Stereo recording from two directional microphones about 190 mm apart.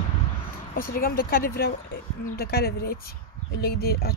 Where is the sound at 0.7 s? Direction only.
50° left (ahead or behind).